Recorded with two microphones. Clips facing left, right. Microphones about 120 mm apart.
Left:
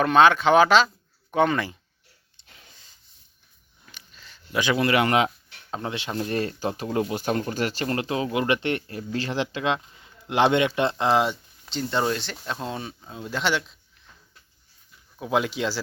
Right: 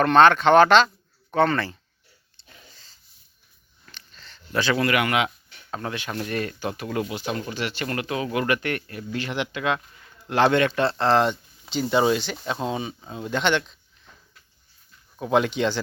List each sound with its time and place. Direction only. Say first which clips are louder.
0.0 s speech: right 2 dB; 5° left (ahead or behind)
2.7 s a sound: right 1 dB; 15° left (ahead or behind); by 5.3 s 35° left (ahead or behind)
5.7 s speech: left 1 dB; 25° left (ahead or behind)
7.1 s speech: left 3 dB; 45° left (ahead or behind)
7.9 s speech: left 1 dB; 30° left (ahead or behind); by 11.3 s 10° left (ahead or behind)
11.6 s speech: right 4 dB; 5° right (ahead or behind)
15.2 s speech: right 3 dB; 5° left (ahead or behind)